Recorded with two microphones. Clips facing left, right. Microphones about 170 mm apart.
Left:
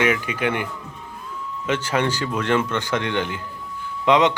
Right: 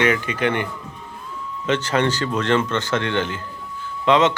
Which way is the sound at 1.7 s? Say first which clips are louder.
Right 2 dB; 10° left (ahead or behind).